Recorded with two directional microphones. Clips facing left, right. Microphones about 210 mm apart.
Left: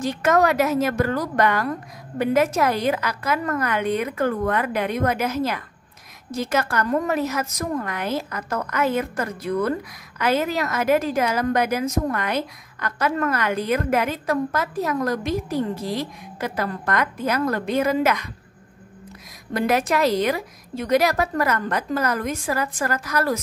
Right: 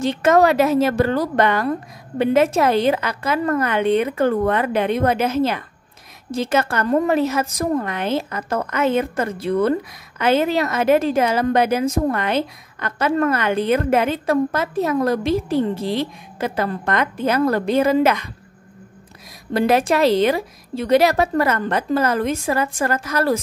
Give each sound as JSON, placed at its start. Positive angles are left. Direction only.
{"t": 0.0, "sound": "a woman's voice", "side_deg": -25}
{"t": 19.5, "sound": "a woman's voice", "side_deg": -30}